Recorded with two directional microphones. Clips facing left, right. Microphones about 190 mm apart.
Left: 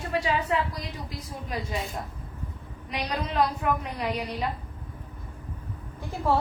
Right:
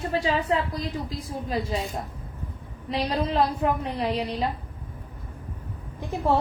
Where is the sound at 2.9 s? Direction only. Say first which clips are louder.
Right 3 dB; 30° right (ahead or behind).